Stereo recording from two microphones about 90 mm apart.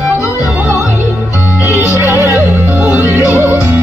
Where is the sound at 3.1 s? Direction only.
25° right (ahead or behind).